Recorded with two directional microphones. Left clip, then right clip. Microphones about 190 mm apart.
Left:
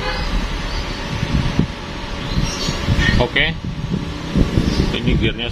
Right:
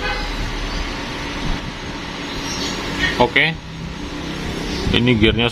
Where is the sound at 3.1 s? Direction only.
15° right (ahead or behind).